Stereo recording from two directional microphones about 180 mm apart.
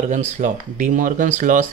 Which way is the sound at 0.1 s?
40° right (ahead or behind).